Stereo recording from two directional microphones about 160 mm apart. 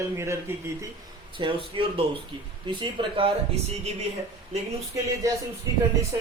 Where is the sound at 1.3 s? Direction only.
30° right (ahead or behind).